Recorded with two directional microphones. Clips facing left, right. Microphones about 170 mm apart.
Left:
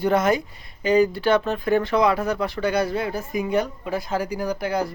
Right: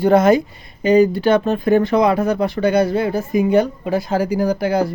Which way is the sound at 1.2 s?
45° right (ahead or behind).